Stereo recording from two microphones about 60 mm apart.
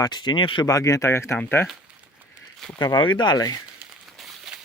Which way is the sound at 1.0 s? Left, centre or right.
Left.